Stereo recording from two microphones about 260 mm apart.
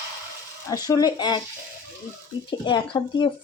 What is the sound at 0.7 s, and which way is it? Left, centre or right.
Speech, centre.